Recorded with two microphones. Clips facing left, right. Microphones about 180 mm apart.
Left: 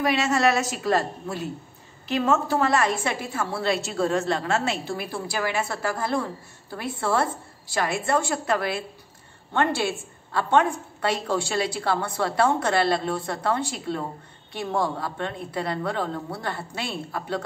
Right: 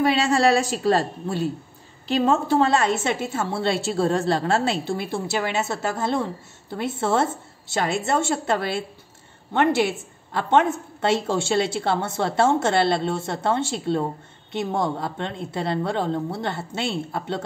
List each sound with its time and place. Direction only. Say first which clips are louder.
0.0 s a woman's voice: right 3 dB; 30° right (ahead or behind)